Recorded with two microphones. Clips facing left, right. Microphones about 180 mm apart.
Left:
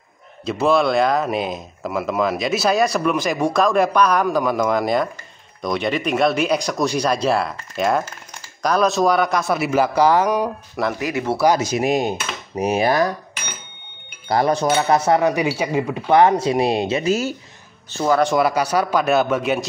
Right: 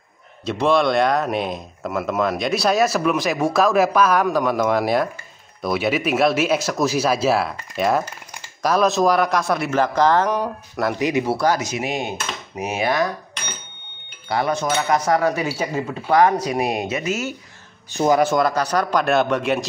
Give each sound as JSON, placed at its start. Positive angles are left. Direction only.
{"t": 0.5, "sound": "speech", "side_deg": 0}
{"t": 11.0, "sound": "speech", "side_deg": -20}
{"t": 11.6, "sound": "dishes", "side_deg": 40}
{"t": 14.3, "sound": "speech", "side_deg": 35}
{"t": 16.1, "sound": "speech", "side_deg": 25}
{"t": 17.9, "sound": "speech", "side_deg": -15}
{"t": 18.2, "sound": "speech", "side_deg": 5}